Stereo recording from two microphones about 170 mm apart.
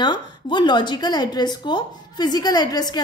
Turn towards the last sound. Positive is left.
turn(degrees=25)  # may be behind; listen again after turning